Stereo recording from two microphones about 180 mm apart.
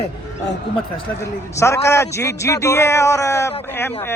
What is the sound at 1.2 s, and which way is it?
A man's voice, 15° left (ahead or behind).